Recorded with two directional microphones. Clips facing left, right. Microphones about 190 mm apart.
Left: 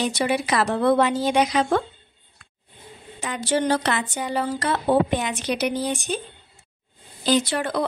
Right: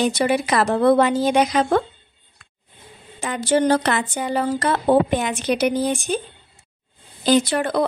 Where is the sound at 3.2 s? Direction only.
50° right (ahead or behind).